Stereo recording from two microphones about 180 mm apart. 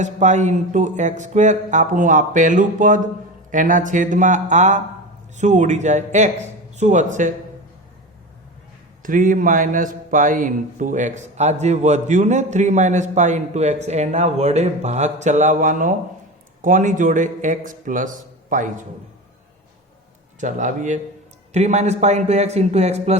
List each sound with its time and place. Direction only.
0.0 s a man's voice: 40° right (ahead or behind)
9.0 s a man's voice: 50° right (ahead or behind)
20.4 s a man's voice: 45° right (ahead or behind)